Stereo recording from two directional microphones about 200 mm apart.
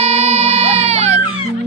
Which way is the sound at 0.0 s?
30° right (ahead or behind).